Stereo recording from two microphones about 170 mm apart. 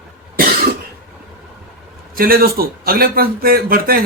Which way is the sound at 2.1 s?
60° right (ahead or behind).